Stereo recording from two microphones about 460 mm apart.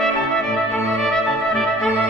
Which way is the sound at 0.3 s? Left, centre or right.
Centre.